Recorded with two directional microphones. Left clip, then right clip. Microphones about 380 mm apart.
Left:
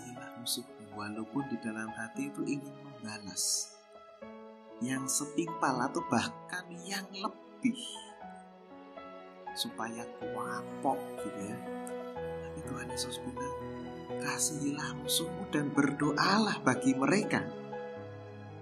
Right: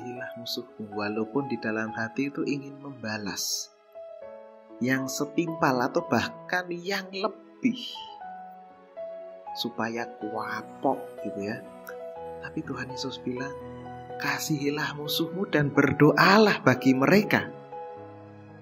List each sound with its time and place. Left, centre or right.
0.9 s speech: centre
4.7 s speech: centre
9.6 s speech: centre